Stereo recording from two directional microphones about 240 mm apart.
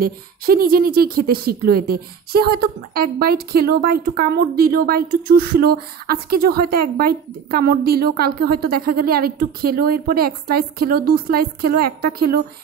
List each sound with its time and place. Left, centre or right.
0.0 s a woman's voice: right